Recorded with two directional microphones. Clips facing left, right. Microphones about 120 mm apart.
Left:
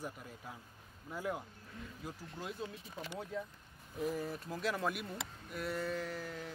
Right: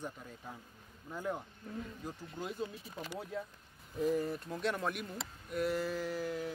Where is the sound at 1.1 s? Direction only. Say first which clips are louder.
Right 1 dB; 5° left (ahead or behind).